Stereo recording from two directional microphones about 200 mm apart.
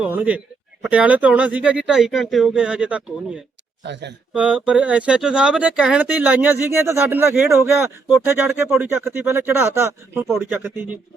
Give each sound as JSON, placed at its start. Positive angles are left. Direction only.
{"t": 0.0, "sound": "speech", "side_deg": -5}
{"t": 3.8, "sound": "speech", "side_deg": -60}
{"t": 4.4, "sound": "speech", "side_deg": -5}